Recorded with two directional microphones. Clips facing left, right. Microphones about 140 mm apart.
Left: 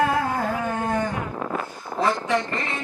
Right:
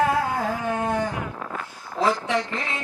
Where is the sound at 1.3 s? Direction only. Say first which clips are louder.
Left 5 dB; 30° left (ahead or behind).